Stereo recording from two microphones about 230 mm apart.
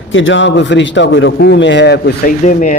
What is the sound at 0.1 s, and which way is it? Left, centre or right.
Speech, left.